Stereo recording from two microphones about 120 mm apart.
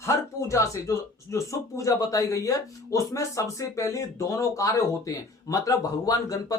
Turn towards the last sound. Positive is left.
turn(degrees=30)  # may be behind; listen again after turning